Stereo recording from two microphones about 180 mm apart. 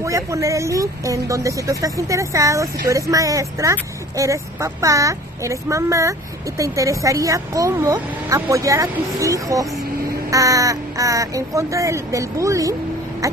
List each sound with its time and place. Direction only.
0.0 s speech: 15° right (ahead or behind)